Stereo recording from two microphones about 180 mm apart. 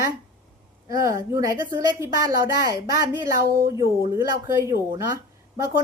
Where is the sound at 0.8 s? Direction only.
20° right (ahead or behind).